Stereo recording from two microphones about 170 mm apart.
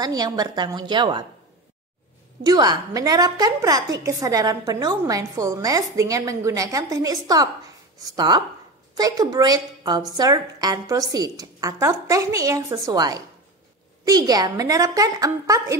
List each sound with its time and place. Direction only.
0.0 s a woman's voice: 20° right (ahead or behind)
2.4 s a woman's voice: 25° right (ahead or behind)